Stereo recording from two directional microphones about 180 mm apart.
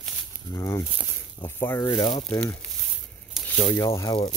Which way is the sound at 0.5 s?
15° left (ahead or behind).